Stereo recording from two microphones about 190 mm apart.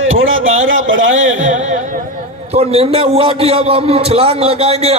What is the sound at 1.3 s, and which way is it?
A man's voice, 40° right (ahead or behind).